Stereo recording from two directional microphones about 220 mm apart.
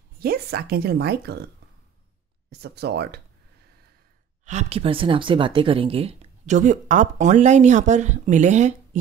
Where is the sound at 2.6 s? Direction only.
50° right (ahead or behind).